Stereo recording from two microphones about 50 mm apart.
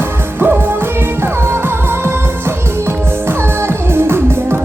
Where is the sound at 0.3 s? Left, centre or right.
Right.